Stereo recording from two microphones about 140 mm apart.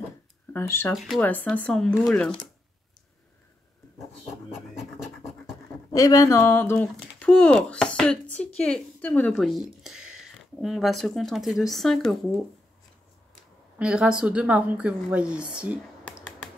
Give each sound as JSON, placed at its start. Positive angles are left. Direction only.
{"t": 0.5, "sound": "speech", "side_deg": 15}
{"t": 0.9, "sound": "speech", "side_deg": 0}
{"t": 1.2, "sound": "speech", "side_deg": 10}
{"t": 4.5, "sound": "scratch", "side_deg": 0}
{"t": 5.9, "sound": "speech", "side_deg": 25}
{"t": 13.7, "sound": "a woman's voice", "side_deg": -5}